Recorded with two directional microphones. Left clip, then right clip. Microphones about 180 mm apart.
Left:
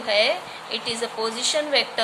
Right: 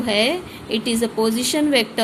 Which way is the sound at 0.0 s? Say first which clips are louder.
Right 1 dB; 45° right (ahead or behind).